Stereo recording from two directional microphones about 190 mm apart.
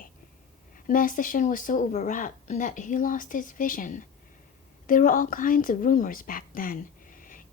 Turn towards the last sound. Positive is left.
turn(degrees=45)  # may be behind; listen again after turning